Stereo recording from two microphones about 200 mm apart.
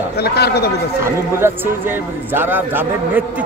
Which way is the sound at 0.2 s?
55° left (ahead or behind).